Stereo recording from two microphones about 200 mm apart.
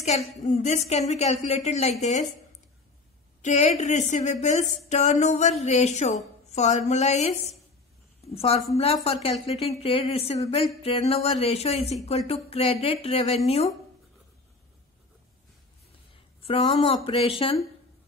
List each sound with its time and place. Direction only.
0.0 s speech: 35° left (ahead or behind)
3.4 s speech: 35° left (ahead or behind)
16.4 s speech: 30° left (ahead or behind)